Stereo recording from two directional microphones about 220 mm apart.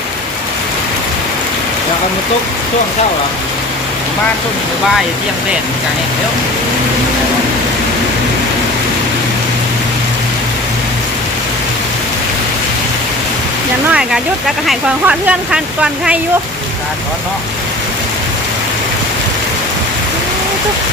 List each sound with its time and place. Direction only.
13.9 s speech: centre (ahead or behind)